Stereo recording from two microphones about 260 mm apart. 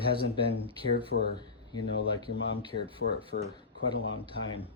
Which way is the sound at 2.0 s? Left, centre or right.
Left.